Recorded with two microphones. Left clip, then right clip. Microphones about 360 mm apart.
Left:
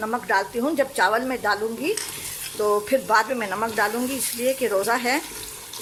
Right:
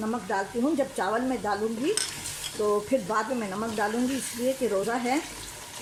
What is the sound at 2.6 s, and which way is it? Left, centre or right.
Speech, left.